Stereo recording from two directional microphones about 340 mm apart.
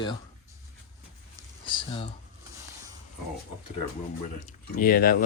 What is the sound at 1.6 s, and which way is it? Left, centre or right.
Speech, centre.